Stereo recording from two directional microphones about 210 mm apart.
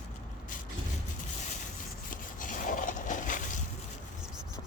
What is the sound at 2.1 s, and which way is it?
Rub, 40° left (ahead or behind).